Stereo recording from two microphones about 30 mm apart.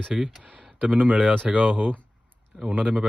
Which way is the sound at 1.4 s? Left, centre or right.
Right.